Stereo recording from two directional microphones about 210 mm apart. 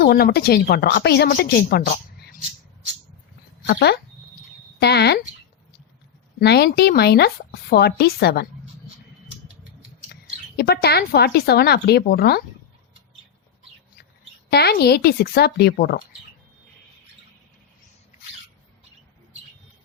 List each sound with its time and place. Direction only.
0.0 s a woman's voice: 50° left (ahead or behind)
3.7 s a woman's voice: 45° left (ahead or behind)
6.4 s a woman's voice: 50° left (ahead or behind)
10.6 s a woman's voice: 50° left (ahead or behind)
14.5 s a woman's voice: 50° left (ahead or behind)